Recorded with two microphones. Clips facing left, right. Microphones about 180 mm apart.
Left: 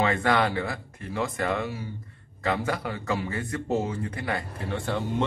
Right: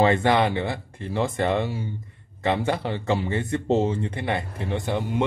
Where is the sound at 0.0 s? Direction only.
25° right (ahead or behind).